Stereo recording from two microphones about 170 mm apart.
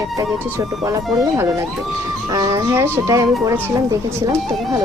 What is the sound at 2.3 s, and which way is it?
Speech, 20° right (ahead or behind).